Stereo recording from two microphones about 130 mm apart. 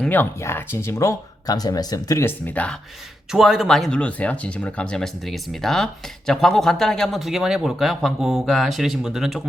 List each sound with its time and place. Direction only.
0.0 s speech: 15° left (ahead or behind)
3.3 s speech: 5° right (ahead or behind)